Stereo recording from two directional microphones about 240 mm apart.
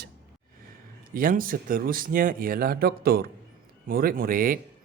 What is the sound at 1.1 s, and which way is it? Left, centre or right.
A man's voice, right.